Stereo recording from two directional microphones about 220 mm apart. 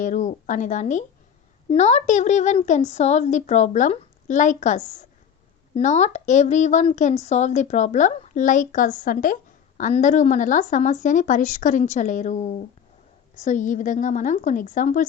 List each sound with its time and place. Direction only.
0.0 s a woman's voice: 35° left (ahead or behind)